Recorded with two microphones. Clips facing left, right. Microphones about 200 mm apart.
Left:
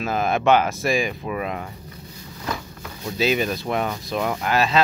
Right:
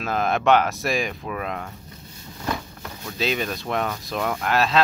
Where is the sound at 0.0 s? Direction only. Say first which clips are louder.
Left 1 dB; centre (ahead or behind).